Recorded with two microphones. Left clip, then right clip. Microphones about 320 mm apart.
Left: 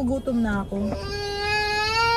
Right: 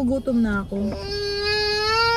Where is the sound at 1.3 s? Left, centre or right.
Centre.